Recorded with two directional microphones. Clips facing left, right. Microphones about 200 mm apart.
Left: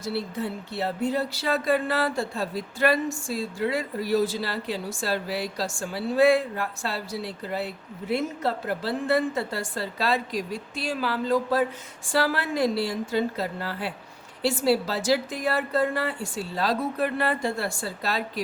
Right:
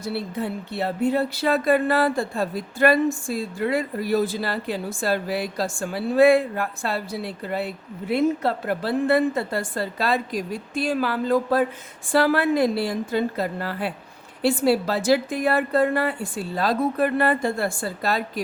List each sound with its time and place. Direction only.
0.0 s a woman's voice: 55° right (ahead or behind)